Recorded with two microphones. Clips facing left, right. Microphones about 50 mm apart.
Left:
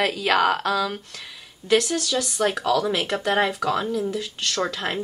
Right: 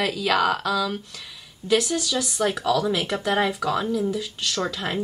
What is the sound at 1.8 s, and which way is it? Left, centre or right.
Speech, centre.